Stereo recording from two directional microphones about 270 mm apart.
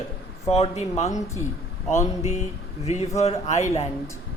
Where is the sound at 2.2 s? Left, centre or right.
Left.